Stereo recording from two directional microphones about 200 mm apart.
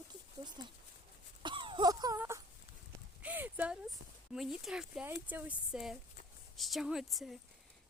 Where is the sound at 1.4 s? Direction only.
25° right (ahead or behind).